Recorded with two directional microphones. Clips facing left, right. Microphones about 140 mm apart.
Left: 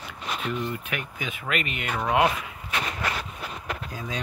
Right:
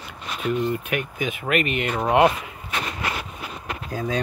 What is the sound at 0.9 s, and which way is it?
Speech, 60° right (ahead or behind).